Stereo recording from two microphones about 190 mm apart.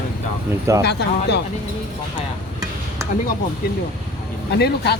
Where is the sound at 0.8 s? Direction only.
60° left (ahead or behind).